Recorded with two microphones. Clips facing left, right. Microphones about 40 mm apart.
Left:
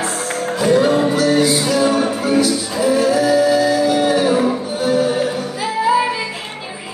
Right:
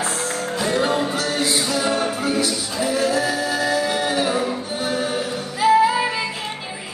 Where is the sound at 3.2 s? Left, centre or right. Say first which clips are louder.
Left 8 dB; centre.